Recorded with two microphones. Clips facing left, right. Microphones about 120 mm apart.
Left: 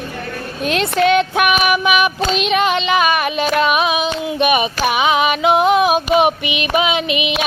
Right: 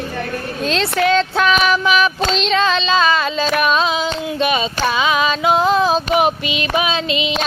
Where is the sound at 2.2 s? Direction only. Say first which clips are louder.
Left 1 dB; 10° left (ahead or behind).